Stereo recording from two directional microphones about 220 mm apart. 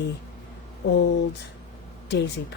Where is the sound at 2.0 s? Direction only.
50° left (ahead or behind).